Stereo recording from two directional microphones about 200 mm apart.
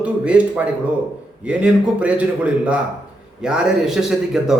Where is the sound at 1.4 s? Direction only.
5° right (ahead or behind).